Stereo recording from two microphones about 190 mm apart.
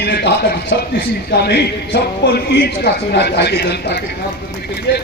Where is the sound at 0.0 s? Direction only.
60° left (ahead or behind).